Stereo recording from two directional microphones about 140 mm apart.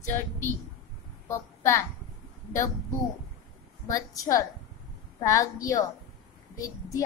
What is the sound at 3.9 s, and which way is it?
A woman's voice, 25° left (ahead or behind).